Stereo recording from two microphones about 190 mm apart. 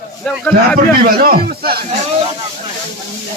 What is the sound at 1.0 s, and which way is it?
Speech, 50° right (ahead or behind).